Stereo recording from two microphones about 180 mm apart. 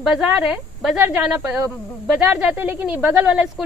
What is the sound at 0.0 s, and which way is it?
A woman's voice, 5° right (ahead or behind).